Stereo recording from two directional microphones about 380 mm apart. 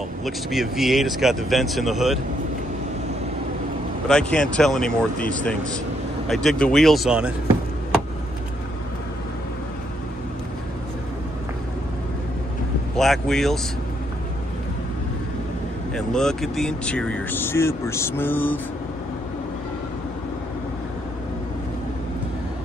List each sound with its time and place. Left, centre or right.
0.2 s speech: centre
4.1 s speech: centre
12.9 s speech: centre
15.9 s speech: centre